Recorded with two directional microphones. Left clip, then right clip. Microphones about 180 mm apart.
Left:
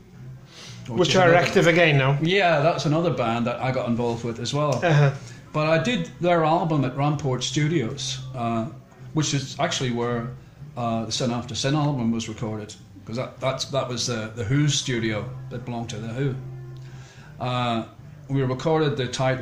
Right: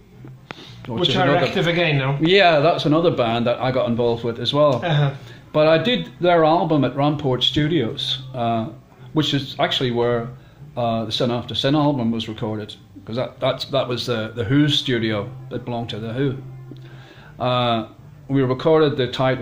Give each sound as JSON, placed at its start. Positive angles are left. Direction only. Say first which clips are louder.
{"t": 1.0, "sound": "a man's voice", "louder": "even", "side_deg": 25}
{"t": 2.2, "sound": "speech", "louder": "right 7 dB", "side_deg": -50}
{"t": 4.8, "sound": "a man's voice", "louder": "left 1 dB", "side_deg": 25}
{"t": 5.5, "sound": "speech", "louder": "right 6 dB", "side_deg": -45}
{"t": 17.4, "sound": "speech", "louder": "right 6 dB", "side_deg": -45}